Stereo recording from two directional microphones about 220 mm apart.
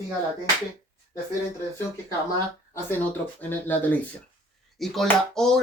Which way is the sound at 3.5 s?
10° left (ahead or behind).